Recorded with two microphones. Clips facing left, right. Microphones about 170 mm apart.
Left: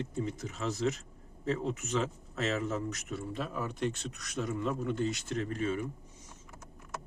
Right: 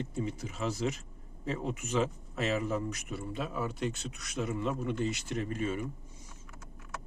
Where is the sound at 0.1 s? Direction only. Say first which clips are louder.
Even; 5° right (ahead or behind).